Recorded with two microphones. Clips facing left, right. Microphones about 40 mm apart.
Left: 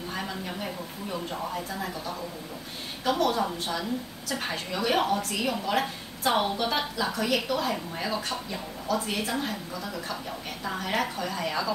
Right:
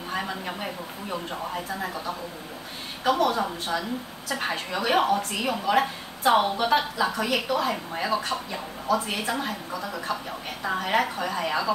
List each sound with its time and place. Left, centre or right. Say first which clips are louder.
0.1 s a woman's voice: right 5 dB; centre